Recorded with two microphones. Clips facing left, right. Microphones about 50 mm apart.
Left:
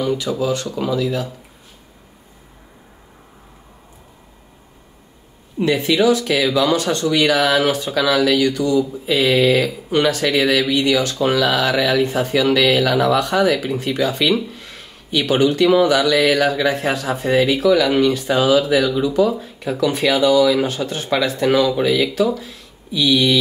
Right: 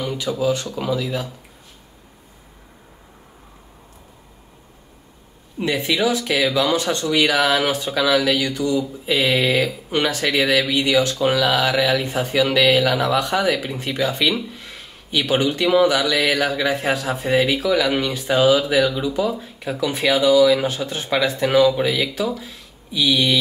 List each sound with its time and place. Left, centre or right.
0.0 s speech: centre
5.6 s speech: centre